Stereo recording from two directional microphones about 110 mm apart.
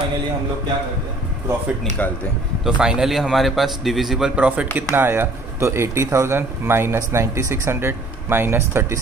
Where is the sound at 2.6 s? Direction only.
5° right (ahead or behind).